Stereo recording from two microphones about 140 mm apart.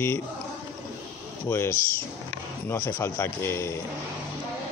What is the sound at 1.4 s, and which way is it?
Speech, 20° left (ahead or behind).